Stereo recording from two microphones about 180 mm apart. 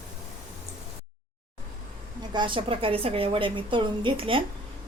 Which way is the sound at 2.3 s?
25° right (ahead or behind).